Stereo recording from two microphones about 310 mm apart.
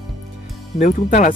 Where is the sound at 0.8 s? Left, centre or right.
Left.